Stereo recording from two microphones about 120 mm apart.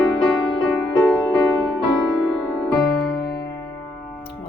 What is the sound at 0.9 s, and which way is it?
Music, 10° left (ahead or behind).